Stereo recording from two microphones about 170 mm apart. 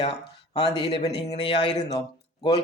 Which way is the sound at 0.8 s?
35° left (ahead or behind).